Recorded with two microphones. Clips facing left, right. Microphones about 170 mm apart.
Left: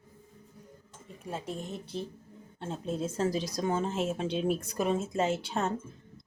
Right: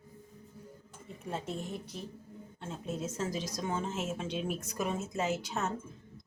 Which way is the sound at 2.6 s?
30° left (ahead or behind).